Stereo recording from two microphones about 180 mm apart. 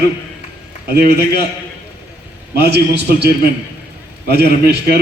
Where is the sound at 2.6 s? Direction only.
65° right (ahead or behind).